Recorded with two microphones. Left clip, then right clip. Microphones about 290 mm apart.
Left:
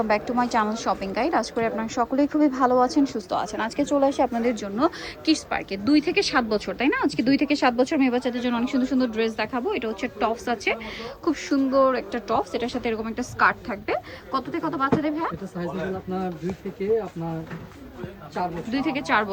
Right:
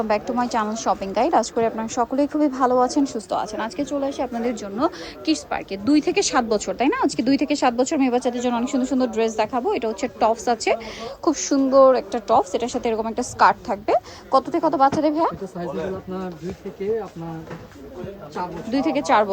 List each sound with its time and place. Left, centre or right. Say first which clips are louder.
0.0 s a woman's voice: right 1 dB; centre
18.7 s a woman's voice: right 6 dB; centre